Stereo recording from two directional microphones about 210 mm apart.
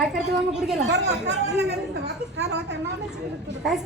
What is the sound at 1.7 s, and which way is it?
A woman's voice, 50° right (ahead or behind).